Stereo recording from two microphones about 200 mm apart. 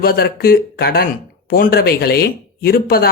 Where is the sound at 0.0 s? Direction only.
50° left (ahead or behind).